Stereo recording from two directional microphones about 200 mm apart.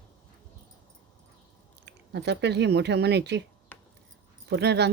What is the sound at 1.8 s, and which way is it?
Speech, 55° right (ahead or behind).